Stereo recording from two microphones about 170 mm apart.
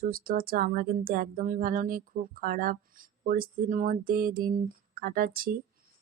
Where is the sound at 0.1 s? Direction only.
60° right (ahead or behind).